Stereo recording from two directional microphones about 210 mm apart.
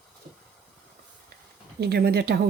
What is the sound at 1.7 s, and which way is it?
Speech, 50° right (ahead or behind).